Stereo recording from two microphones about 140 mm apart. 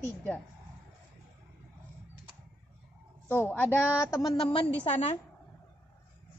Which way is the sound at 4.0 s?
20° left (ahead or behind).